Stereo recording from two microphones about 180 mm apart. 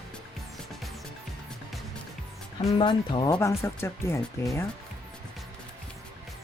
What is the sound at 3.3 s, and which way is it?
Speech, 15° left (ahead or behind).